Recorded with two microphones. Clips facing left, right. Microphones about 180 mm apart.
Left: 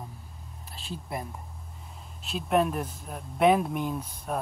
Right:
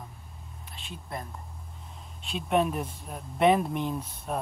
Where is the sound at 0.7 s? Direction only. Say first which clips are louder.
Left 6 dB; 35° left (ahead or behind).